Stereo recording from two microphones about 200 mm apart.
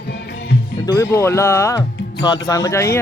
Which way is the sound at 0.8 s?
15° left (ahead or behind).